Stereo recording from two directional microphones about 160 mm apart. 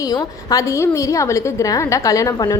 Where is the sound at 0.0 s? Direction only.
25° left (ahead or behind).